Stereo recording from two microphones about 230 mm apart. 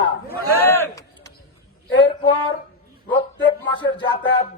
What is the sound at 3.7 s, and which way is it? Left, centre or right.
Speech, centre.